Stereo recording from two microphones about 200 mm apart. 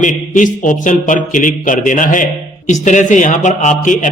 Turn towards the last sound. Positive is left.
turn(degrees=40)  # may be behind; listen again after turning